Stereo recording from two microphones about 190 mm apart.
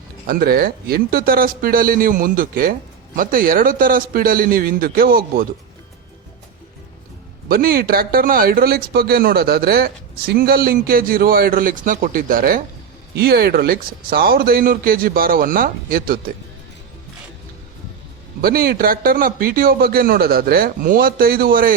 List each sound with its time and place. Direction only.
0.3 s a man's voice: 50° right (ahead or behind)
7.4 s a man's voice: 50° right (ahead or behind)
18.4 s a man's voice: 50° right (ahead or behind)